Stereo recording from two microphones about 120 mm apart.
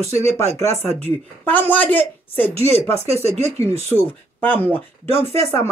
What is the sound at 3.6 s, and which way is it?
Speech, 20° left (ahead or behind).